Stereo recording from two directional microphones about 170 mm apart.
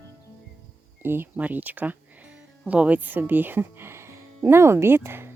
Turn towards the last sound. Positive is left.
turn(degrees=-15)  # may be behind; listen again after turning